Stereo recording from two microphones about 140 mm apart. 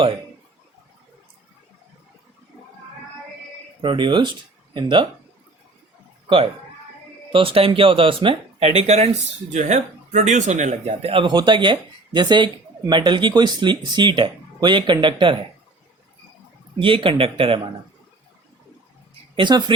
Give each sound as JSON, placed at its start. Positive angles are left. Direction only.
{"t": 3.8, "sound": "speech", "side_deg": -35}
{"t": 6.2, "sound": "a man's voice", "side_deg": -40}
{"t": 16.8, "sound": "speech", "side_deg": -40}
{"t": 19.4, "sound": "speech", "side_deg": -35}